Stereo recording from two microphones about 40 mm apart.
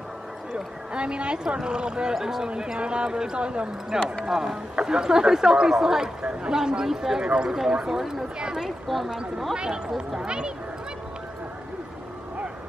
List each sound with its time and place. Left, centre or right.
0.9 s speech: right
2.1 s speech: centre
4.0 s speech: centre
4.3 s speech: centre
8.4 s speech: right
8.6 s speech: centre
9.6 s speech: centre